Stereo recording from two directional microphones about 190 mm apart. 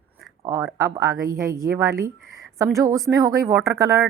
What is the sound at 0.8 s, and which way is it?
Speech, 15° right (ahead or behind).